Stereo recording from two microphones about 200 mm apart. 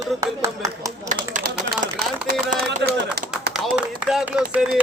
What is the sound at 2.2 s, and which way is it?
Speech, 50° right (ahead or behind).